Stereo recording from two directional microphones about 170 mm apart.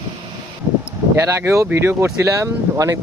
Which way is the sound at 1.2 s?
15° right (ahead or behind).